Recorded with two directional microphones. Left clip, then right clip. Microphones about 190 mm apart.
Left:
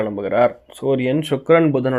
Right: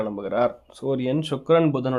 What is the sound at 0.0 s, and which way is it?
Speech, 5° left (ahead or behind).